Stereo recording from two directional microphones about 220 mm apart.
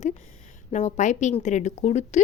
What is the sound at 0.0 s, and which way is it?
A woman's voice, 30° left (ahead or behind).